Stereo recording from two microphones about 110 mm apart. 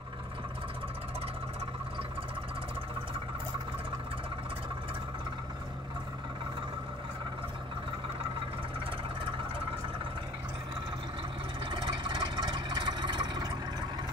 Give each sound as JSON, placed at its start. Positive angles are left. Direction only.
{"t": 11.7, "sound": "engine", "side_deg": -45}